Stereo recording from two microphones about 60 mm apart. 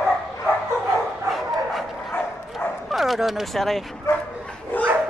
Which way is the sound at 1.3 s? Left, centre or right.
Centre.